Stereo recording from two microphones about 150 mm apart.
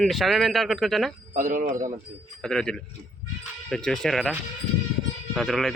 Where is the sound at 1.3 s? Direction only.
65° right (ahead or behind).